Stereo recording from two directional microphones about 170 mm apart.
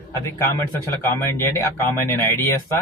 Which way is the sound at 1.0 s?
15° left (ahead or behind).